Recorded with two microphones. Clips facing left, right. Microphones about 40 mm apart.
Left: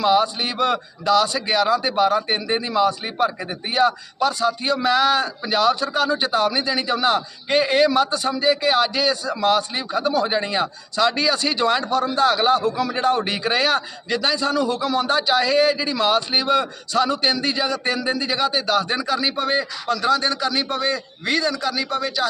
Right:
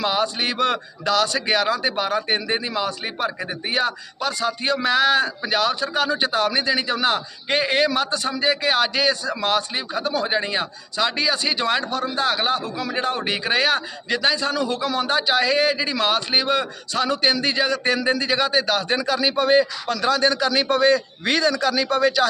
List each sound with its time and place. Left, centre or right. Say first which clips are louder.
0.0 s a man's voice: left 4 dB; right
2.5 s speech: left 1 dB; right
3.3 s speech: even; centre
3.7 s a man's voice: left 5 dB; right
10.2 s a man's voice: left 1 dB; right